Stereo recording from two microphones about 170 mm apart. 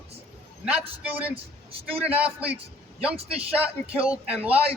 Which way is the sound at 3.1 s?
35° right (ahead or behind).